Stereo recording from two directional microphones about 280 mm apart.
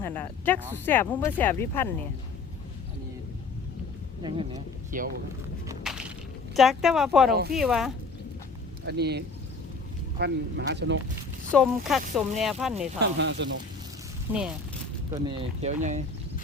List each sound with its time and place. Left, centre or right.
0.0 s speech: centre
4.2 s speech: centre
4.9 s speech: right
5.6 s a sound: centre
6.6 s speech: centre
8.9 s speech: right
11.5 s speech: centre
13.0 s speech: right
14.3 s speech: centre
15.1 s speech: centre